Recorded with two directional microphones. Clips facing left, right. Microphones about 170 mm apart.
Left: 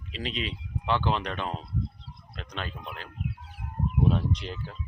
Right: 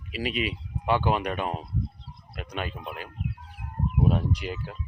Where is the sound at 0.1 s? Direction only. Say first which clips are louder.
Right 5 dB; 10° right (ahead or behind).